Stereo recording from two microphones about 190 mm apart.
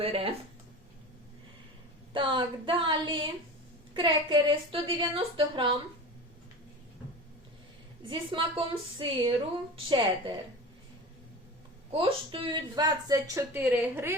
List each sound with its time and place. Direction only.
0.0 s a woman's voice: 30° right (ahead or behind)
2.1 s a woman's voice: 25° right (ahead or behind)
8.0 s a woman's voice: 25° right (ahead or behind)
11.9 s speech: 30° right (ahead or behind); by 14.2 s 10° right (ahead or behind)